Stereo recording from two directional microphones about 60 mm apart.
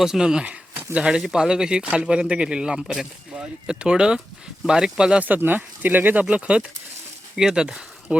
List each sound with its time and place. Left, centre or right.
0.0 s speech: centre
5.2 s speech: right
6.2 s speech: centre